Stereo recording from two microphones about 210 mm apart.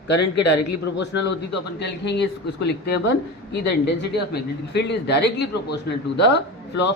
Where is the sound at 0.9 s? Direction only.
55° left (ahead or behind).